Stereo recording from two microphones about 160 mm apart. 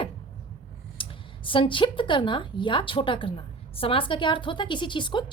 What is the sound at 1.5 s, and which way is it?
A woman's voice, 30° left (ahead or behind).